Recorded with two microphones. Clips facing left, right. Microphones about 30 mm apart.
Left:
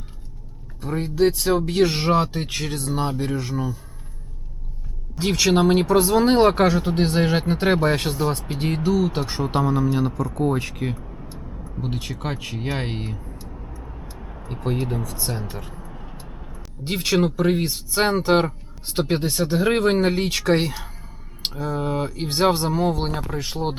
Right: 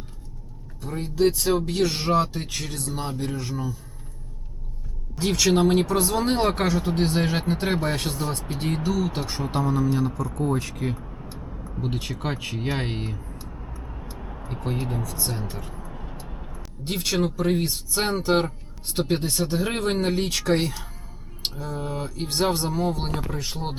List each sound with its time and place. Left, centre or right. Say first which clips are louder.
0.8 s speech: left 5 dB; left
1.1 s speech: left 2 dB; centre
1.7 s speech: left 3 dB; left
5.1 s speech: left 2 dB; centre
10.9 s vehicle: left 1 dB; centre
11.8 s speech: even; centre
15.9 s vehicle: right 1 dB; centre
16.8 s speech: left 4 dB; centre